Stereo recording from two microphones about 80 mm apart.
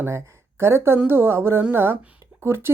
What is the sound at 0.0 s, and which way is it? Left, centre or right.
Speech, right.